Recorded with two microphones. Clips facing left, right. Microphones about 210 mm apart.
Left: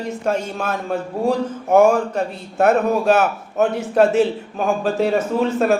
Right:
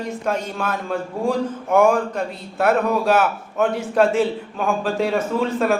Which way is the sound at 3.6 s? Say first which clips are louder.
Left 2 dB; 20° left (ahead or behind).